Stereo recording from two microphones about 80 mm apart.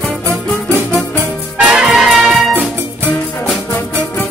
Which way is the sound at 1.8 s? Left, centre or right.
Centre.